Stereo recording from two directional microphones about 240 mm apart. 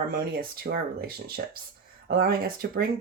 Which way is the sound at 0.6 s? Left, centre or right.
Right.